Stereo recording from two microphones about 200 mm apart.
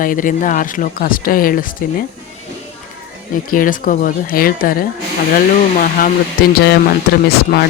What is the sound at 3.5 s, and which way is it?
Speech, 45° left (ahead or behind).